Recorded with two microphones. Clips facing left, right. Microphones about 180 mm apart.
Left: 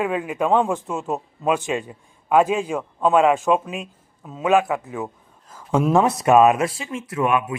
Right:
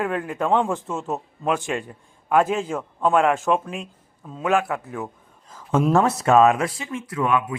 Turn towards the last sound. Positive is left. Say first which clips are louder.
# left 1 dB
turn(degrees=20)  # may be behind; listen again after turning